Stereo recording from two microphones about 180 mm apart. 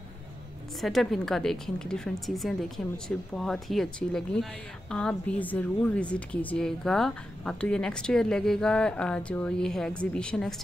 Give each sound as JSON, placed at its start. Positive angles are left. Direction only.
{"t": 0.7, "sound": "a woman's voice", "side_deg": 0}